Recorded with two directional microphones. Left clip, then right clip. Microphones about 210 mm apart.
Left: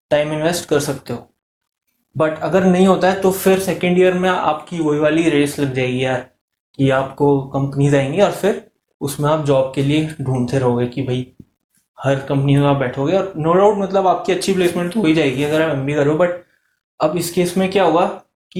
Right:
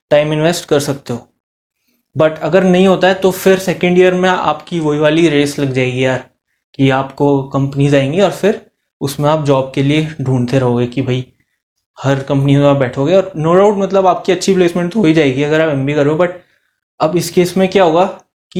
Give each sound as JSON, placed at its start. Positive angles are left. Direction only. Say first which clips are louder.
{"t": 0.1, "sound": "speech", "louder": "right 5 dB", "side_deg": -40}
{"t": 2.1, "sound": "speech", "louder": "right 5 dB", "side_deg": -40}